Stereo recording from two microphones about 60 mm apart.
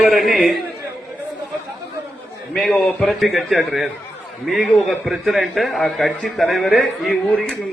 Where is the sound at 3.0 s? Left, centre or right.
Centre.